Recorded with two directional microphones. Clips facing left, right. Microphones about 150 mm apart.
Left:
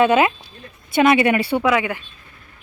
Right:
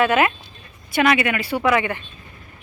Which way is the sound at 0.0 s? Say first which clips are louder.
Left 3 dB; 20° left (ahead or behind).